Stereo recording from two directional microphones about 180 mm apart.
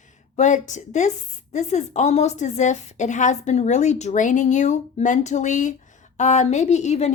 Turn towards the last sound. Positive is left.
turn(degrees=40)  # may be behind; listen again after turning